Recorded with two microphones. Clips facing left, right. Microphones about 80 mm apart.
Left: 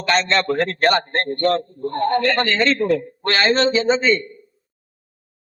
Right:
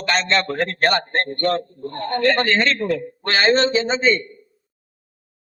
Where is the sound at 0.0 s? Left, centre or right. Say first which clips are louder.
Left 2 dB; centre.